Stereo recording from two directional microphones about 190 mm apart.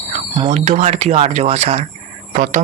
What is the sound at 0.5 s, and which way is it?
Speech, 35° right (ahead or behind).